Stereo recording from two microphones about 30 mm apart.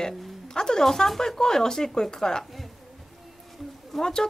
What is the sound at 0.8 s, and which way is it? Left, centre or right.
Speech, centre.